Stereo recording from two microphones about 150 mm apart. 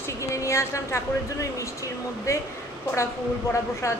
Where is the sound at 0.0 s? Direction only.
20° left (ahead or behind).